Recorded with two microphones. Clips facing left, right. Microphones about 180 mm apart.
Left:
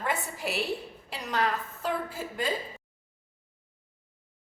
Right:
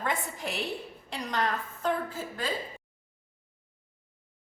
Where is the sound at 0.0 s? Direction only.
5° left (ahead or behind).